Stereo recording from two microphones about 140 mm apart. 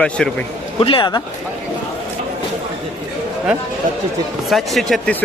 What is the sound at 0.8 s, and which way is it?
Speech, 40° left (ahead or behind).